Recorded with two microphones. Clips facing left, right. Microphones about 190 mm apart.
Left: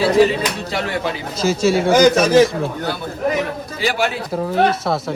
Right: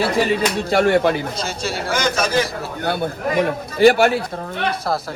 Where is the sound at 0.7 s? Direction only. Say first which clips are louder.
Right 7 dB; 50° right (ahead or behind).